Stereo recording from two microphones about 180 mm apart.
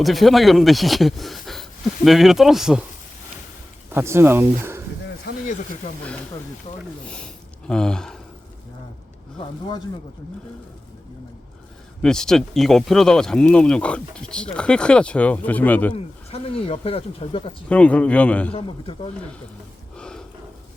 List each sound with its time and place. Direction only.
0.0 s speech: centre (ahead or behind)
3.9 s speech: 15° right (ahead or behind)
5.5 s speech: 45° left (ahead or behind)
7.7 s speech: 5° left (ahead or behind)
12.0 s speech: 5° left (ahead or behind)
16.3 s speech: 35° left (ahead or behind)
17.7 s a man's voice: 5° left (ahead or behind)
18.5 s speech: 35° left (ahead or behind)
20.0 s a sound: 5° left (ahead or behind)